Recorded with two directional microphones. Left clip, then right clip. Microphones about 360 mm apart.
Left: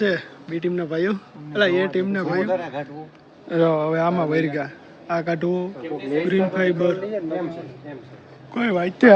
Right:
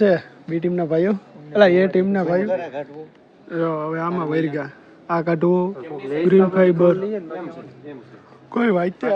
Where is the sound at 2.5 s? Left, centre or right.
Left.